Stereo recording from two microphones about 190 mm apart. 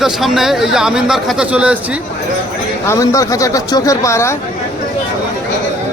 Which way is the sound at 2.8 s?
15° left (ahead or behind).